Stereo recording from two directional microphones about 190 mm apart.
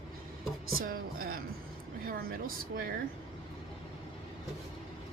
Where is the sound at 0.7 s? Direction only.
50° right (ahead or behind).